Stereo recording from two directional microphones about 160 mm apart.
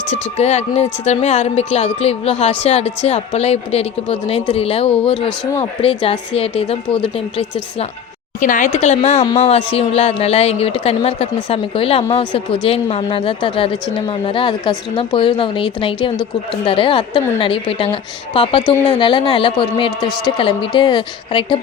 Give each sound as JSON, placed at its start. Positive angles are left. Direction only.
{"t": 0.1, "sound": "a woman's voice", "side_deg": 45}
{"t": 8.4, "sound": "a woman's voice", "side_deg": 55}